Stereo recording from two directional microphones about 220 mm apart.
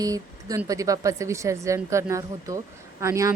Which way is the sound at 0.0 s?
15° right (ahead or behind).